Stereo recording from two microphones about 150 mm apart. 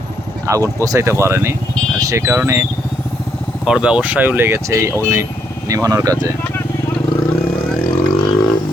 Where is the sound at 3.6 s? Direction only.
5° right (ahead or behind); by 6.3 s 25° right (ahead or behind).